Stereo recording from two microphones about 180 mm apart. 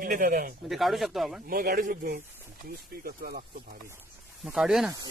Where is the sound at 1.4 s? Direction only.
55° right (ahead or behind).